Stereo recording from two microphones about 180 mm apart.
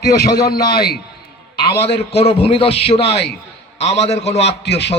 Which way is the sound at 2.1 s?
35° left (ahead or behind).